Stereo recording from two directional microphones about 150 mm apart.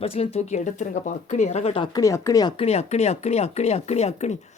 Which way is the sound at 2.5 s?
45° left (ahead or behind).